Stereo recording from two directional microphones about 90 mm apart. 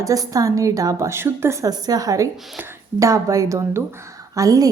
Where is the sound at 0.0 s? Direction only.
40° right (ahead or behind).